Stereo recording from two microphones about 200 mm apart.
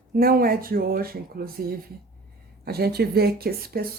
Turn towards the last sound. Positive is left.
turn(degrees=-50)  # may be behind; listen again after turning